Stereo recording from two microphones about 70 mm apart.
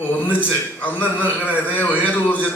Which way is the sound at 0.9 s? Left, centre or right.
Left.